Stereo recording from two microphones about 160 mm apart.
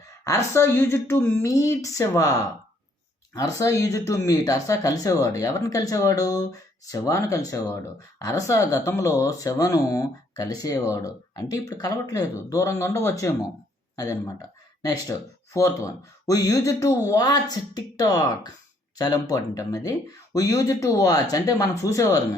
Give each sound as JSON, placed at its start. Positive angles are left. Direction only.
{"t": 0.3, "sound": "a woman's voice", "side_deg": 15}
{"t": 3.3, "sound": "speech", "side_deg": 20}